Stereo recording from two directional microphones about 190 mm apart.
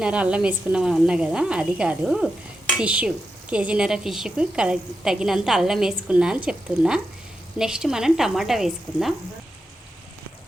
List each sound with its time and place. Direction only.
0.0 s a woman's voice: 5° right (ahead or behind)